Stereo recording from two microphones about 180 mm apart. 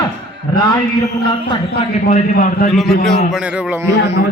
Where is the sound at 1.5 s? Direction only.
35° left (ahead or behind).